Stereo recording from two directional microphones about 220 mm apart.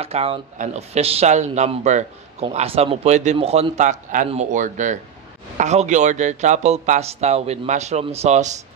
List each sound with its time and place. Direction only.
0.0 s speech: 25° right (ahead or behind)